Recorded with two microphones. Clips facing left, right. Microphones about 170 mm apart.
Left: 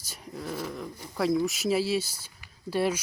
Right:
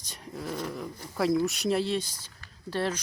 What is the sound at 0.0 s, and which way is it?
Dog, 5° left (ahead or behind).